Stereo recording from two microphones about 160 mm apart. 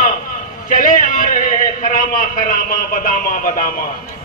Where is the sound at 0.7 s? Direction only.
55° left (ahead or behind).